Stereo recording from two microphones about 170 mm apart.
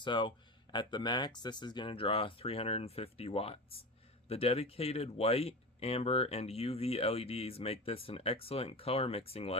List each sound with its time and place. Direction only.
0.0 s speech: 25° left (ahead or behind)